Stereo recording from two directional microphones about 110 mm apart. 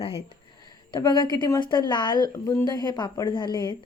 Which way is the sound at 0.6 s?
40° left (ahead or behind).